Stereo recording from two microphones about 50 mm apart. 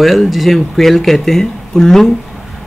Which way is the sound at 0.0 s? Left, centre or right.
Centre.